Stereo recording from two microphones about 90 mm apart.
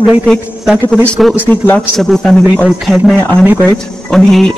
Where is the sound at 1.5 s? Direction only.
20° left (ahead or behind).